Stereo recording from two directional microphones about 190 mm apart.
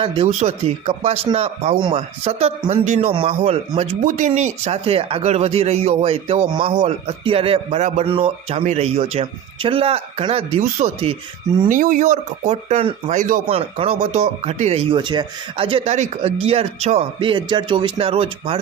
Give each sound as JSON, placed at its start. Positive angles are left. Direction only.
{"t": 0.0, "sound": "speech", "side_deg": -30}
{"t": 11.7, "sound": "speech", "side_deg": -45}
{"t": 13.5, "sound": "speech", "side_deg": -30}